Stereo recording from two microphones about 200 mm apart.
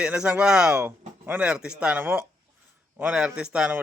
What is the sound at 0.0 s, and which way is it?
A man's voice, 5° right (ahead or behind).